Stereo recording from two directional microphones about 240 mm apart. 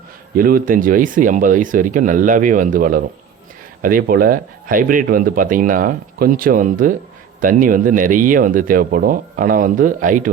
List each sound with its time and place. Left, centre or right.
0.3 s speech: right